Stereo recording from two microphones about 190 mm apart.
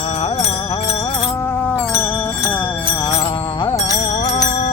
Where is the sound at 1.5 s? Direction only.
10° left (ahead or behind).